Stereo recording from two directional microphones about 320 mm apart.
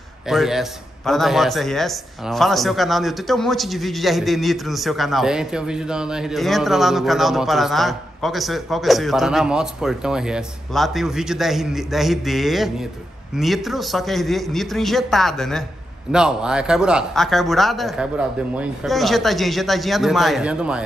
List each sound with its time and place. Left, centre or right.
0.3 s a man's voice: centre